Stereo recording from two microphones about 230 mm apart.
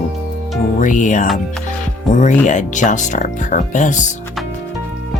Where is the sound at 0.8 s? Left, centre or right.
Left.